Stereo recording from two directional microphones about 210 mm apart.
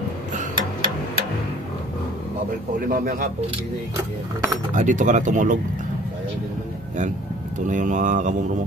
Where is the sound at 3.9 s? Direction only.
15° right (ahead or behind).